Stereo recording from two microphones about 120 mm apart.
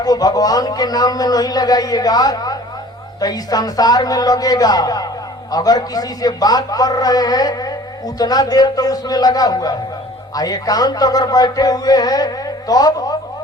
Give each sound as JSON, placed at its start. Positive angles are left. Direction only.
{"t": 0.0, "sound": "a man's voice", "side_deg": 30}